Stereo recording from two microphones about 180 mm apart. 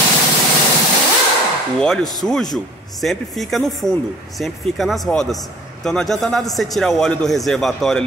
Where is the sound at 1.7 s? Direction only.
5° left (ahead or behind).